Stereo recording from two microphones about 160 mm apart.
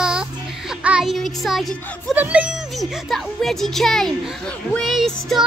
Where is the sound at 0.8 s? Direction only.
5° right (ahead or behind).